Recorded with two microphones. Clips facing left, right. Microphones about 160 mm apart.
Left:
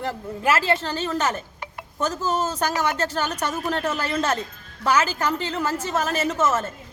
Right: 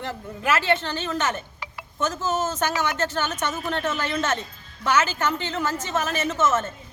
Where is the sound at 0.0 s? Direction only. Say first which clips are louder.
Left 4 dB; 35° left (ahead or behind).